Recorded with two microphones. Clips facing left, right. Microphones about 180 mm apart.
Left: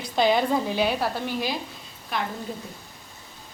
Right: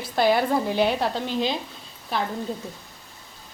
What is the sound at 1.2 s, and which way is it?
Speech, 20° right (ahead or behind).